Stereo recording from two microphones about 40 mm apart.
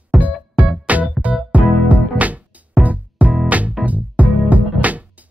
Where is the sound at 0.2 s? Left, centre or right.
Right.